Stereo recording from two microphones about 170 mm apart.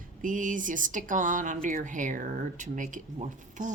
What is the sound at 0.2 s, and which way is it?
Speech, 50° right (ahead or behind).